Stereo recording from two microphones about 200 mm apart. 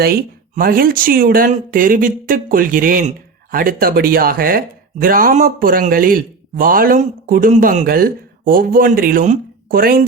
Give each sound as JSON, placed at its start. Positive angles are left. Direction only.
{"t": 0.0, "sound": "speech", "side_deg": -50}